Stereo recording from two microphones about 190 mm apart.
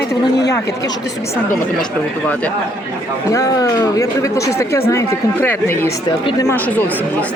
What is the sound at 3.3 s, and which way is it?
Speech, 20° left (ahead or behind).